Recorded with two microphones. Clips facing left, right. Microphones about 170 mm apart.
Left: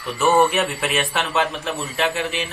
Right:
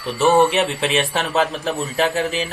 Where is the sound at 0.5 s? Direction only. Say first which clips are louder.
Right 3 dB; 20° right (ahead or behind).